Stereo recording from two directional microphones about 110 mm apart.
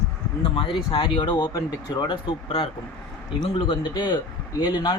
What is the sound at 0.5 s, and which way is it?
Speech, 55° left (ahead or behind).